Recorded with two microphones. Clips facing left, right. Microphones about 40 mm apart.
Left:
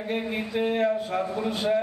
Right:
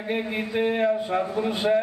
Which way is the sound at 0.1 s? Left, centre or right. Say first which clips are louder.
Right 2 dB; centre.